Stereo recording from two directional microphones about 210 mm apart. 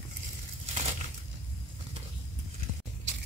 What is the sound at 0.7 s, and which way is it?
Crumpling, 30° right (ahead or behind).